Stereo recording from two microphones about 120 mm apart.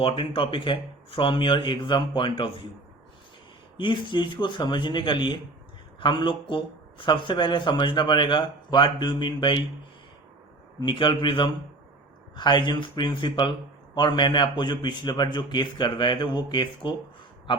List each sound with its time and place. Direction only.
0.0 s speech: 45° left (ahead or behind)
3.8 s speech: 40° left (ahead or behind)
10.8 s speech: 40° left (ahead or behind)